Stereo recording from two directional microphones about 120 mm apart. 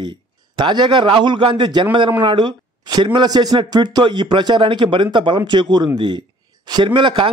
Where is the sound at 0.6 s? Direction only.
40° right (ahead or behind).